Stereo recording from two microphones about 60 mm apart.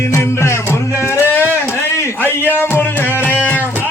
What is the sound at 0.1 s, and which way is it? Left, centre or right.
Music, left.